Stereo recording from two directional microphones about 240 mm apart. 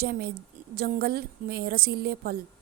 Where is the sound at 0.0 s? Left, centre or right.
Right.